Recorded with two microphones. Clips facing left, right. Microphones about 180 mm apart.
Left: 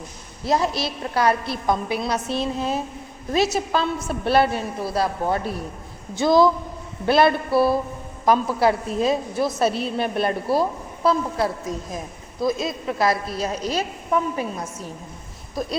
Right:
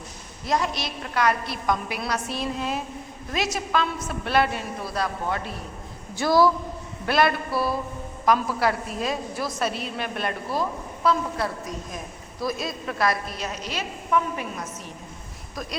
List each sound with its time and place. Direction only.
0.4 s a woman's voice: 30° left (ahead or behind)
6.1 s a woman's voice: 20° left (ahead or behind)